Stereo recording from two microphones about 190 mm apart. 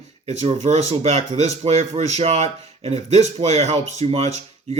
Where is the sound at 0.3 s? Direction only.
35° right (ahead or behind).